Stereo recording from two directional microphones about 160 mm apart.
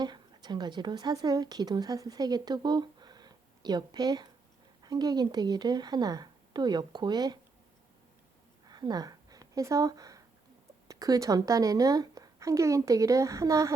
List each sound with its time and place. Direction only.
0.0 s a woman's voice: 25° right (ahead or behind)
8.6 s a sound: 25° right (ahead or behind)
10.8 s a woman's voice: 20° right (ahead or behind)